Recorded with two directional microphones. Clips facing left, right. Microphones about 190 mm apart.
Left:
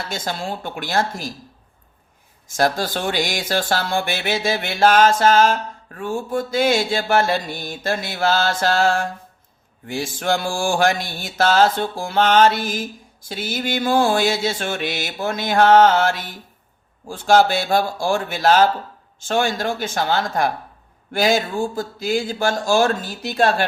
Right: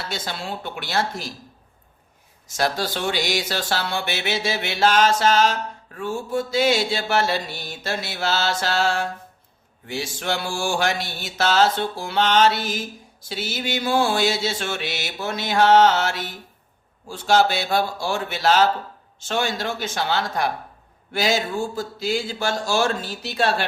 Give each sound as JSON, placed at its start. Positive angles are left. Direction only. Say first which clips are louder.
{"t": 0.1, "sound": "mantra", "louder": "left 4 dB", "side_deg": 45}
{"t": 2.6, "sound": "mantra", "louder": "left 3 dB", "side_deg": 50}
{"t": 21.1, "sound": "speech", "louder": "left 4 dB", "side_deg": 50}
{"t": 21.8, "sound": "mantra", "louder": "left 3 dB", "side_deg": 50}